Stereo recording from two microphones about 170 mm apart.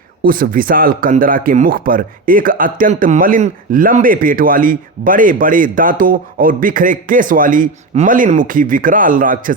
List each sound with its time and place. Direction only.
0.2 s speech: 60° right (ahead or behind)